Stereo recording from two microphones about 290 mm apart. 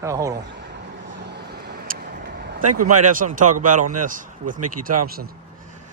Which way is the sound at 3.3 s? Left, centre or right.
Right.